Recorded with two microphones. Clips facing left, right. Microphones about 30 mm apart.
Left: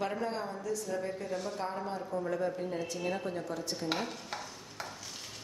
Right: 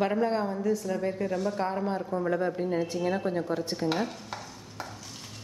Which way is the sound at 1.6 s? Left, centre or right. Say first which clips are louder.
Right 7 dB; right.